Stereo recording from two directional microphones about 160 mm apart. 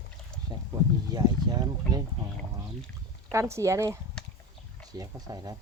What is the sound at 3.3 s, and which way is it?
Speech, 20° right (ahead or behind).